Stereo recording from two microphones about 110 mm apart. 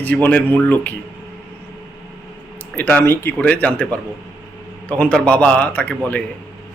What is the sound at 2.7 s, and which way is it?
A man's voice, 15° left (ahead or behind).